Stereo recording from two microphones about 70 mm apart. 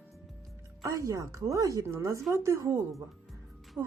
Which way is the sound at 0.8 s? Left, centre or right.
Right.